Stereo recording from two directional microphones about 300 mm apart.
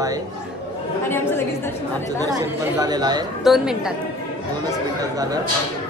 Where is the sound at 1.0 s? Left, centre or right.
Centre.